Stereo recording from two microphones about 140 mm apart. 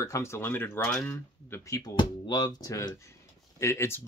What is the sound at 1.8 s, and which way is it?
Speech, 30° left (ahead or behind).